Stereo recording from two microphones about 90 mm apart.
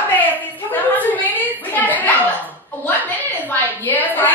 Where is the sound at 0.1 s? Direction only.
20° left (ahead or behind).